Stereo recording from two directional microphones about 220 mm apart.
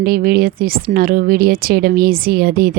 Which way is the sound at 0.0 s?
40° right (ahead or behind).